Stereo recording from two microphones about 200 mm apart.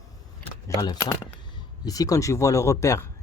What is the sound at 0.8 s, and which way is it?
Speech, 15° left (ahead or behind).